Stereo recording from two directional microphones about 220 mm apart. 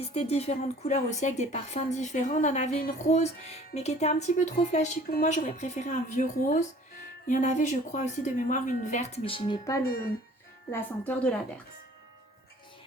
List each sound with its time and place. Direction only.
0.0 s a woman's voice: 30° left (ahead or behind); by 11.3 s 5° left (ahead or behind)